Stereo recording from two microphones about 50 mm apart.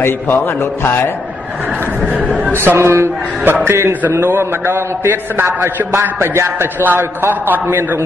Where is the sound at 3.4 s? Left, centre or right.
Right.